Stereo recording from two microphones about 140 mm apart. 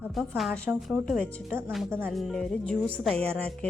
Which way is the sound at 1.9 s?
15° right (ahead or behind).